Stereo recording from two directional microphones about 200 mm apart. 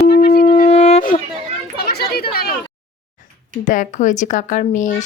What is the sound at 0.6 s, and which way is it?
Wind instrument, 30° left (ahead or behind).